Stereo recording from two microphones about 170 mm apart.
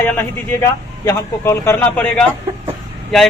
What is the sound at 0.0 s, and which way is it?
A man's voice, 10° left (ahead or behind).